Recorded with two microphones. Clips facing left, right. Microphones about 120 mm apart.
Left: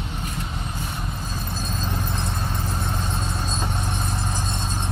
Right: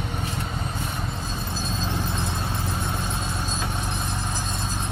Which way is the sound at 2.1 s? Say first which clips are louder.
Even; centre (ahead or behind).